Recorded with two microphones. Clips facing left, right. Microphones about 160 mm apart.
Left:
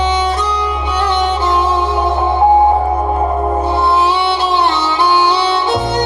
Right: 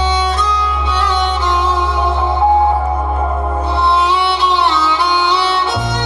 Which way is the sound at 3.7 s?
20° left (ahead or behind).